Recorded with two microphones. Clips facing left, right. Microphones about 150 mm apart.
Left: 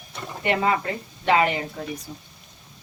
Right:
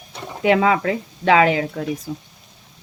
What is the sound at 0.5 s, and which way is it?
Speech, 90° right.